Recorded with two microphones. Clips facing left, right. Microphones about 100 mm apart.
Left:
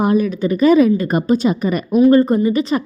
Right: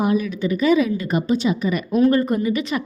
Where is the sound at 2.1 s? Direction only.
30° left (ahead or behind).